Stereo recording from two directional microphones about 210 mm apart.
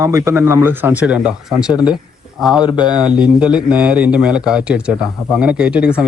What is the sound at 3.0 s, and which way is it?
A man's voice, 5° right (ahead or behind).